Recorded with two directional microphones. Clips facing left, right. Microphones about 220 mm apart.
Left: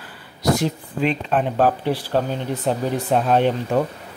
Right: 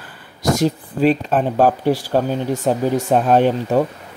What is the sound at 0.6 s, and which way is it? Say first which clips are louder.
Speech: right 5 dB; 40° right (ahead or behind).